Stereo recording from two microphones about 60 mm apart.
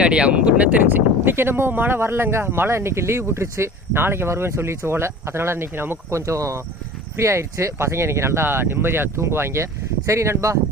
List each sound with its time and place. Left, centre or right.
0.0 s speech: centre
0.9 s speech: right
6.1 s speech: right